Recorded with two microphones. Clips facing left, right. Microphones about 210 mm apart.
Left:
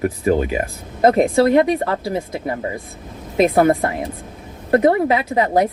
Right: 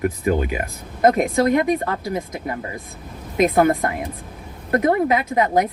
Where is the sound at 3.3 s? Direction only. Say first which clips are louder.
Left 2 dB; 35° left (ahead or behind).